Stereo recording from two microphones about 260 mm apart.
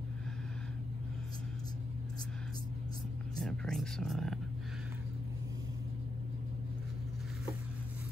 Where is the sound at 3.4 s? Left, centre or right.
Centre.